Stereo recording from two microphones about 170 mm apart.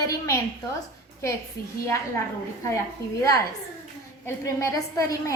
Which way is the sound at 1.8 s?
15° left (ahead or behind).